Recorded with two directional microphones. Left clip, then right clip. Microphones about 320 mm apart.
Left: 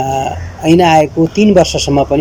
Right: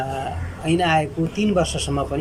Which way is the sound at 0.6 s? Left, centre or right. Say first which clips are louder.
Left 11 dB; left.